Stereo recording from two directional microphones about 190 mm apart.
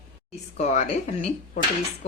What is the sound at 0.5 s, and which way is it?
Speech, 40° left (ahead or behind).